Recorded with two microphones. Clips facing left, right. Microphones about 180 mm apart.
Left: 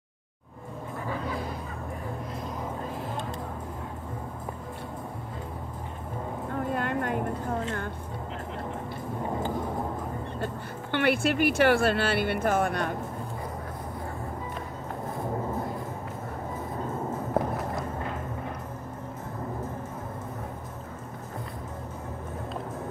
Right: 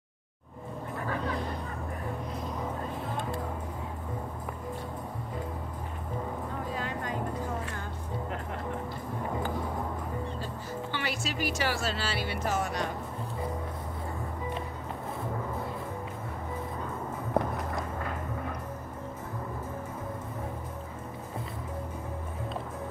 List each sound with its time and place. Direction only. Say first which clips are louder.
6.6 s music: left 9 dB; 55° left (ahead or behind)
10.4 s speech: left 2 dB; 60° left (ahead or behind)
17.4 s walk: left 1 dB; 5° left (ahead or behind)